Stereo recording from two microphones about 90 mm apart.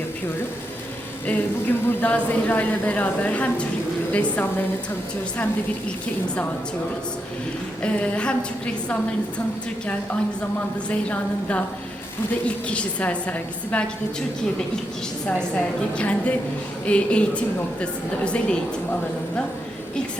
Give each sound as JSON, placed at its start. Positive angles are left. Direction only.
{"t": 1.3, "sound": "a woman's voice", "side_deg": 15}
{"t": 7.8, "sound": "a woman's voice", "side_deg": 15}
{"t": 10.8, "sound": "a woman's voice", "side_deg": 15}
{"t": 15.4, "sound": "a woman's voice", "side_deg": 15}